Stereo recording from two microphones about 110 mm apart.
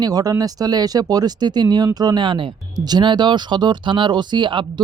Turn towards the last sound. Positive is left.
turn(degrees=-45)  # may be behind; listen again after turning